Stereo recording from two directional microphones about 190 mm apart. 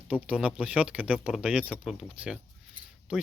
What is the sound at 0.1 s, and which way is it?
Speech, 5° right (ahead or behind).